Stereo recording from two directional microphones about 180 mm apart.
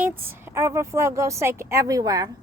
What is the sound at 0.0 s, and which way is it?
A woman's voice, 10° right (ahead or behind).